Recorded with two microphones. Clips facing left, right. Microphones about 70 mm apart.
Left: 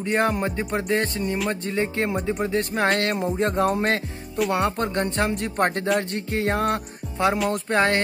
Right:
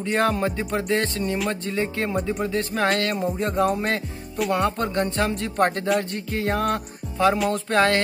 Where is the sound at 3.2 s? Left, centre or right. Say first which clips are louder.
Even; left.